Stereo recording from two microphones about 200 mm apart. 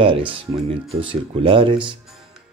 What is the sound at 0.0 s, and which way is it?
Mantra, 25° right (ahead or behind).